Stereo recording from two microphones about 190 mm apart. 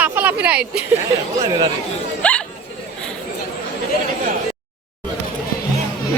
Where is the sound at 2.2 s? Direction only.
5° left (ahead or behind).